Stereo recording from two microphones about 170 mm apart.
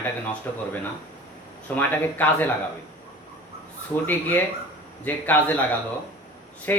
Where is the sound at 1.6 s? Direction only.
10° left (ahead or behind).